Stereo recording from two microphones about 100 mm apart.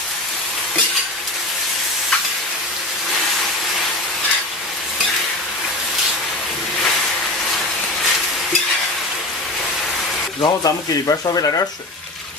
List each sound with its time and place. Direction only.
10.4 s speech: 40° left (ahead or behind)